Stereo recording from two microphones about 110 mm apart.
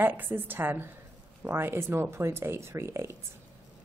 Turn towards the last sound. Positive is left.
turn(degrees=-25)  # may be behind; listen again after turning